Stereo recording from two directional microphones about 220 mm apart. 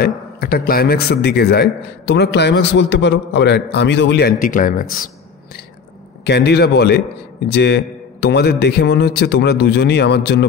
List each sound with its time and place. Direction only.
0.0 s a man's voice: 45° left (ahead or behind)
6.2 s a man's voice: 50° left (ahead or behind)